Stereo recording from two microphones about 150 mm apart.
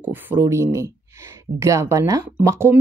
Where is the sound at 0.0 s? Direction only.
15° right (ahead or behind).